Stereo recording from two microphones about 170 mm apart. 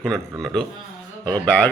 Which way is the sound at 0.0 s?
5° left (ahead or behind).